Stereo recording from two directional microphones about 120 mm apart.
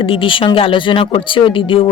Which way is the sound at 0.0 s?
45° left (ahead or behind).